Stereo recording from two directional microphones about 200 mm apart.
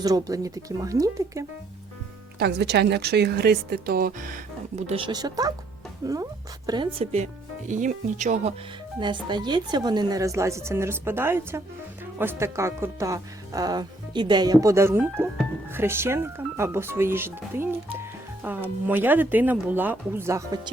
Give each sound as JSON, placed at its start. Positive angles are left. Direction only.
{"t": 0.0, "sound": "speech", "side_deg": -20}
{"t": 2.4, "sound": "speech", "side_deg": -55}
{"t": 4.9, "sound": "speech", "side_deg": -25}
{"t": 9.0, "sound": "speech", "side_deg": -25}